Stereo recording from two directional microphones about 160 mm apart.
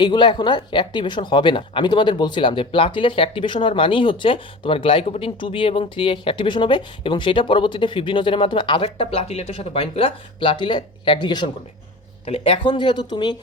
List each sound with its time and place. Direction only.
0.0 s speech: 30° left (ahead or behind)